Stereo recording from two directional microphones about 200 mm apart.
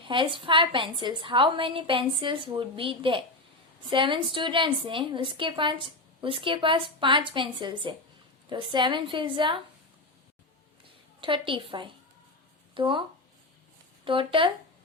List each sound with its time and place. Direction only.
0.0 s a woman's voice: 25° right (ahead or behind)
11.2 s a woman's voice: 25° right (ahead or behind)